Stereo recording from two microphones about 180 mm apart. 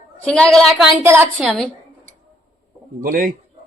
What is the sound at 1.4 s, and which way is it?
Speech, centre (ahead or behind).